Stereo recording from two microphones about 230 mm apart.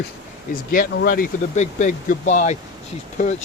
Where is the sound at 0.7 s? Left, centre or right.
Left.